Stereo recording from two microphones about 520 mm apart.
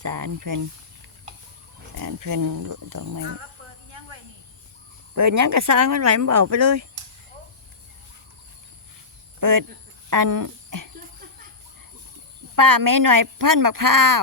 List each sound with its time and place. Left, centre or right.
0.0 s speech: right
2.0 s speech: right
5.1 s speech: right
9.4 s speech: right
12.5 s speech: right